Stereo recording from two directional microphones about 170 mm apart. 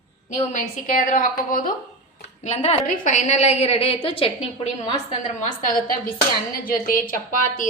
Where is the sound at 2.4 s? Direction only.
40° left (ahead or behind).